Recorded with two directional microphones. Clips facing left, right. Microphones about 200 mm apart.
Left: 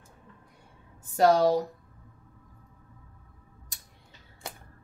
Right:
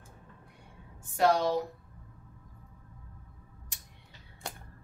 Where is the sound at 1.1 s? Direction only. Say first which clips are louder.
Left 5 dB; 40° left (ahead or behind).